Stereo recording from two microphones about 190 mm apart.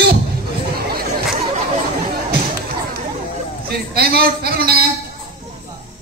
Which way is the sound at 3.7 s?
55° right (ahead or behind).